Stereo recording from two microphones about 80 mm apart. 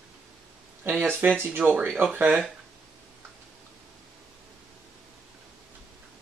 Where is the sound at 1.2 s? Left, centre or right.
Right.